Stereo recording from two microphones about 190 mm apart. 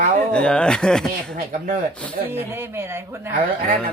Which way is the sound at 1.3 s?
45° right (ahead or behind).